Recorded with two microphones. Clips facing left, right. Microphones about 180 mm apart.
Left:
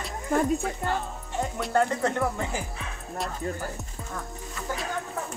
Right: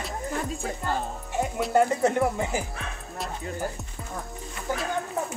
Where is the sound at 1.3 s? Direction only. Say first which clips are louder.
Right 3 dB; 10° right (ahead or behind).